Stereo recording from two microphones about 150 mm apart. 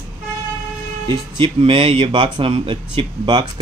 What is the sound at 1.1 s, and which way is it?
Speech, 35° right (ahead or behind).